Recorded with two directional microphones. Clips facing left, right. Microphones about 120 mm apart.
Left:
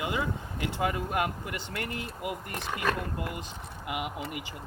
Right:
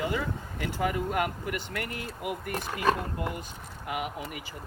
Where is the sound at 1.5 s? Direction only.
25° left (ahead or behind).